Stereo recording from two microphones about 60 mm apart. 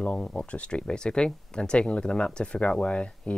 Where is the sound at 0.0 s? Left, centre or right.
Centre.